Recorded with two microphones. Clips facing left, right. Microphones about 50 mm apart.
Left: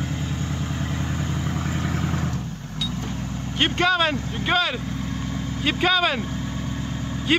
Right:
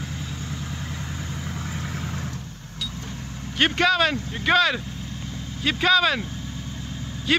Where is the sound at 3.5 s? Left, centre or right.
Centre.